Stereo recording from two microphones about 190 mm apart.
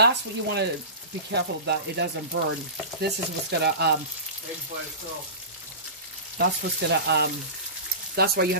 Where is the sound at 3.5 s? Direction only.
60° right (ahead or behind).